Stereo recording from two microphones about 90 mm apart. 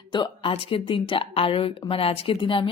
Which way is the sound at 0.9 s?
80° left.